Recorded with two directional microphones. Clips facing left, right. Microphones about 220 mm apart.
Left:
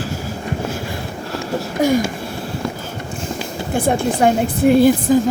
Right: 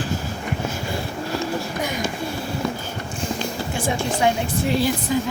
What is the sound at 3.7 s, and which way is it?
Speech, 55° left (ahead or behind).